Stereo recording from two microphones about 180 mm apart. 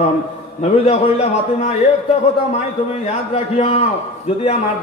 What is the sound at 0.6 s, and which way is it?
A man's voice, 35° left (ahead or behind).